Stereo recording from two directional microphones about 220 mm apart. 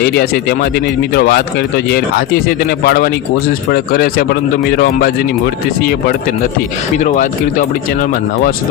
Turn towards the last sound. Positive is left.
turn(degrees=35)  # may be behind; listen again after turning